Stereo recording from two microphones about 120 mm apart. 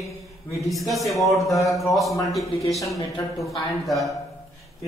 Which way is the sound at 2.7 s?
25° left (ahead or behind).